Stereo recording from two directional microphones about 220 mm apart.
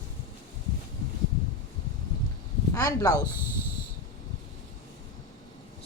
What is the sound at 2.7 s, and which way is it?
Speech, 15° left (ahead or behind).